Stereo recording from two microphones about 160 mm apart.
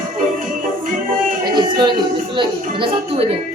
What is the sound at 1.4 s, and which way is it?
Music, 30° right (ahead or behind).